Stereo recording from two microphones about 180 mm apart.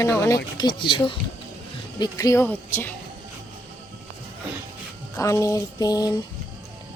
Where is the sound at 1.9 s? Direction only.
20° left (ahead or behind).